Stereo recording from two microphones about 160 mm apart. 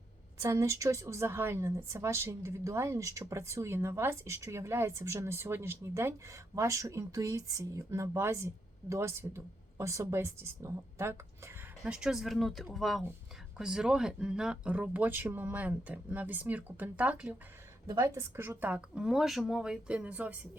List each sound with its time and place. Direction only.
0.4 s speech: 20° right (ahead or behind)
11.8 s speech: 5° right (ahead or behind)
17.8 s speech: 20° right (ahead or behind)